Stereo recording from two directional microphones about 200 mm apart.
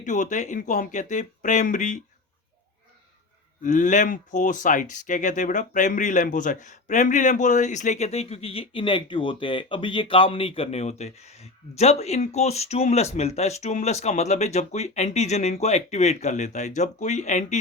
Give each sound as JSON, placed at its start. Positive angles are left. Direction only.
{"t": 0.0, "sound": "speech", "side_deg": 40}
{"t": 3.6, "sound": "speech", "side_deg": 40}